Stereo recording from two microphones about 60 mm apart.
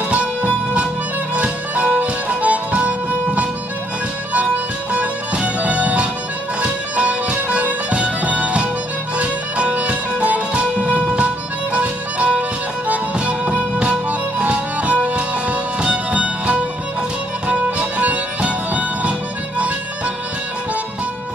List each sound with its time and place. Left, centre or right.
0.1 s music: centre
4.9 s music: right